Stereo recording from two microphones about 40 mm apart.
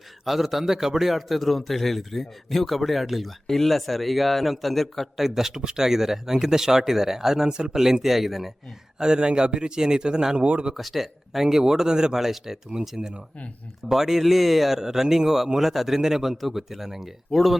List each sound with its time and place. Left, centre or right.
0.3 s speech: centre
1.1 s speech: centre
5.2 s speech: centre
7.4 s speech: right
7.8 s speech: centre
9.0 s speech: right
10.4 s speech: right
10.8 s speech: centre
13.0 s speech: right
13.8 s speech: centre